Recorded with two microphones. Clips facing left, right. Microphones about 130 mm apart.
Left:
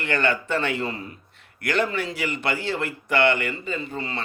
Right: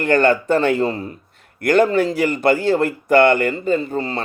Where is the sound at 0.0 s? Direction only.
45° right (ahead or behind).